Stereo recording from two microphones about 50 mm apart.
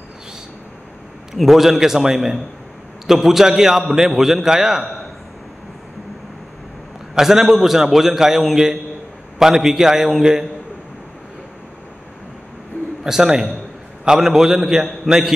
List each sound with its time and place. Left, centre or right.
1.3 s a man's voice: centre
7.2 s a man's voice: centre
13.0 s a man's voice: centre